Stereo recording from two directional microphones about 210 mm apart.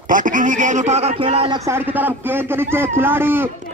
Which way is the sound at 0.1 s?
40° right (ahead or behind).